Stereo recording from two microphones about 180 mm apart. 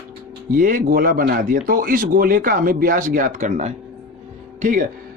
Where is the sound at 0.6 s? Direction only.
50° right (ahead or behind).